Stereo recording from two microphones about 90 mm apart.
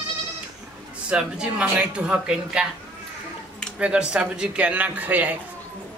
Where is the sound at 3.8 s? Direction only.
10° right (ahead or behind).